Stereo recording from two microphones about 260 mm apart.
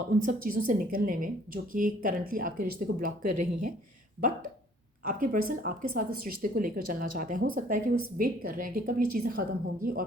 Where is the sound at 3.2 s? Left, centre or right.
Right.